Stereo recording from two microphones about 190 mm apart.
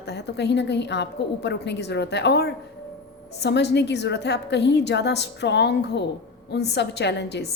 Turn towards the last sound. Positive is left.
turn(degrees=65)  # may be behind; listen again after turning